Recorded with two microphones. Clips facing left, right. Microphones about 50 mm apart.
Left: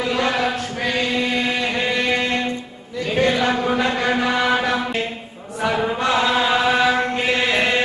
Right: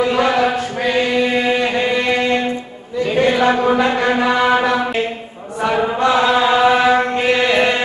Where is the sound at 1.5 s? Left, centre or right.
Centre.